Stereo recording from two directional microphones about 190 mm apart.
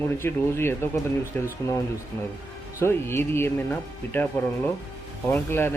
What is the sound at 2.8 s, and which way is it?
Speech, 10° left (ahead or behind).